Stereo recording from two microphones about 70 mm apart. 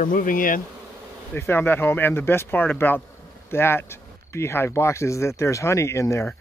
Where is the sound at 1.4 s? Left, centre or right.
Left.